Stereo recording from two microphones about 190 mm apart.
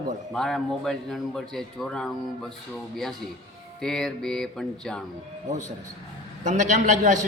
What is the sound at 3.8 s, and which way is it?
Speech, centre (ahead or behind).